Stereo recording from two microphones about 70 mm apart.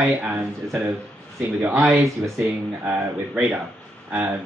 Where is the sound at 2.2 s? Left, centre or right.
Centre.